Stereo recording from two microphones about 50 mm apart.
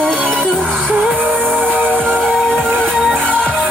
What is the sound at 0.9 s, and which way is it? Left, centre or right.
Music, right.